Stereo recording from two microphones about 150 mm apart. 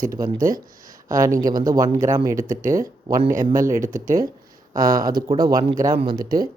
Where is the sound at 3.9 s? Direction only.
65° right (ahead or behind).